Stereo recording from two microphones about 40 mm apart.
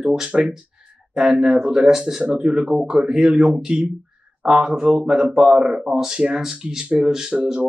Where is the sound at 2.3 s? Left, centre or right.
Right.